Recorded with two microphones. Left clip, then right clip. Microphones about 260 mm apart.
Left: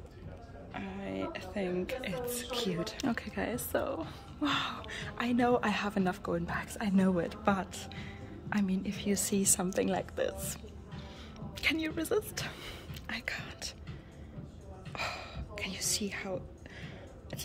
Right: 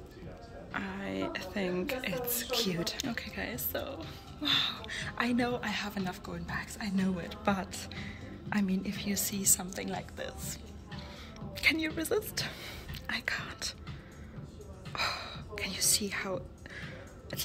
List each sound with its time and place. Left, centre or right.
0.7 s speech: centre
3.0 s speech: centre
5.5 s a woman's voice: left
7.4 s a woman's voice: centre
9.2 s a woman's voice: left
11.5 s a woman's voice: centre
14.9 s music: centre